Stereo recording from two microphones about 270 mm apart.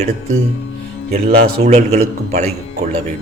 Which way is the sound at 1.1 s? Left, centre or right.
Right.